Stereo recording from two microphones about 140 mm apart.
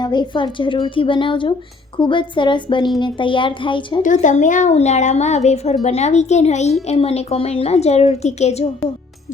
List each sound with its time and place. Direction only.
0.0 s a woman's voice: 30° left (ahead or behind)
4.0 s speech: 65° left (ahead or behind)